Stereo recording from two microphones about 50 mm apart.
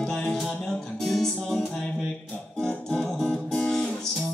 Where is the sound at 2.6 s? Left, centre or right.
Centre.